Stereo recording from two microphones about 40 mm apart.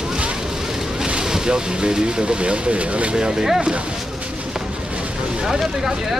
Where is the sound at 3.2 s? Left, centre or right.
Centre.